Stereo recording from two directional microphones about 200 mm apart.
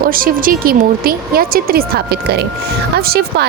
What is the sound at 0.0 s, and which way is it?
Speech, 45° right (ahead or behind).